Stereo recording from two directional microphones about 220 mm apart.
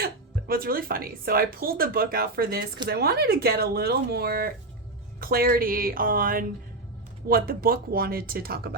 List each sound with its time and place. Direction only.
0.0 s speech: 40° right (ahead or behind)